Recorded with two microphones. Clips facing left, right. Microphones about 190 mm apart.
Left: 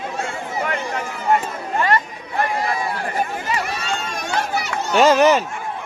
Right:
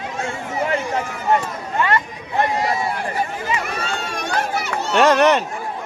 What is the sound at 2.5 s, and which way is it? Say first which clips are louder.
Run: right 2 dB; 25° right (ahead or behind).